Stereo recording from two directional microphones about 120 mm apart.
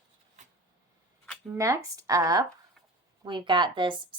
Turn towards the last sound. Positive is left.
turn(degrees=-40)  # may be behind; listen again after turning